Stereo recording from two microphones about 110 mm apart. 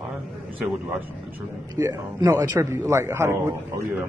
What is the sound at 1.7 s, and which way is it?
A man's voice, 35° right (ahead or behind).